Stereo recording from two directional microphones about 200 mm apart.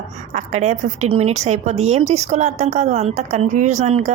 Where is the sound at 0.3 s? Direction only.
35° right (ahead or behind).